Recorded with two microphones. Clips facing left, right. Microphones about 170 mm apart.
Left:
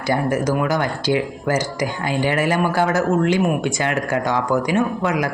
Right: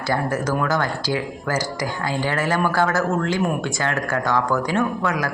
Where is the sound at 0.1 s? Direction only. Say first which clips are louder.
Left 3 dB; 15° left (ahead or behind).